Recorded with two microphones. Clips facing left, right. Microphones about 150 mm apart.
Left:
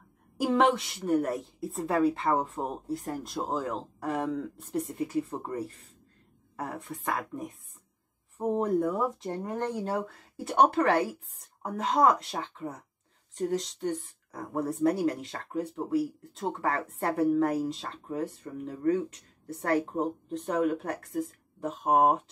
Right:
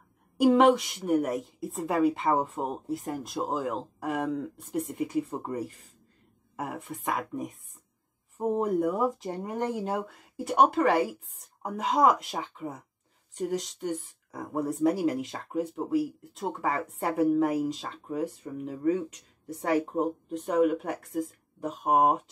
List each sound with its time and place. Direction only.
0.4 s speech: 5° right (ahead or behind)